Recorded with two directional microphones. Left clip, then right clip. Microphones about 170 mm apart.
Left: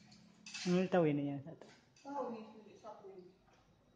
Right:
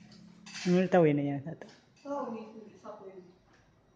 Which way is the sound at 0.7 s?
Centre (ahead or behind).